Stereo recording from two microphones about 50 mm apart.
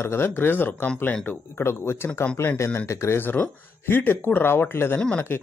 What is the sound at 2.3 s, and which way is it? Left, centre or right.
Speech, left.